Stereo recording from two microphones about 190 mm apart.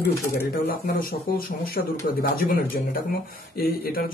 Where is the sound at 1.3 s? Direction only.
50° left (ahead or behind).